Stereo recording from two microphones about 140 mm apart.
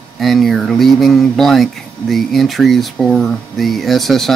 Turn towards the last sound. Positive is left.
turn(degrees=0)  # may be behind; listen again after turning